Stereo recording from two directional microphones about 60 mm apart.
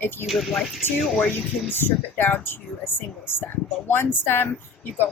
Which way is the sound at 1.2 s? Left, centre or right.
Left.